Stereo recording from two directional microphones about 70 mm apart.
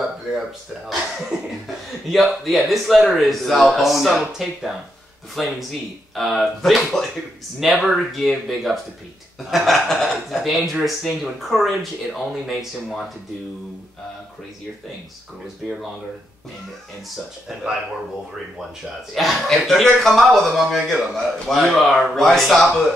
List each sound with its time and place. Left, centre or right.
1.3 s cough: centre
1.9 s a man's voice: centre
19.1 s a man's voice: centre